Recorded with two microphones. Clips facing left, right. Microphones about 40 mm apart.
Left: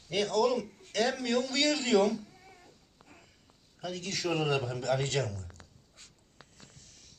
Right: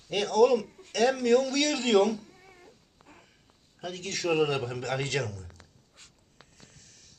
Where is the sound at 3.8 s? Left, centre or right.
Right.